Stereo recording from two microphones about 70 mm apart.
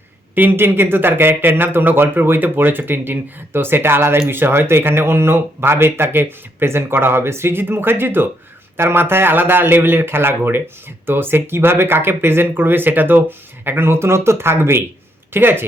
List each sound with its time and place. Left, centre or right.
0.3 s speech: right